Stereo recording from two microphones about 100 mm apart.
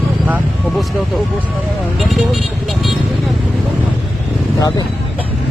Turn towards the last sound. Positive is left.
turn(degrees=40)  # may be behind; listen again after turning